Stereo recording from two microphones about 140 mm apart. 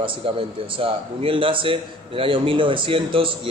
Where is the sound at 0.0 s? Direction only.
40° right (ahead or behind).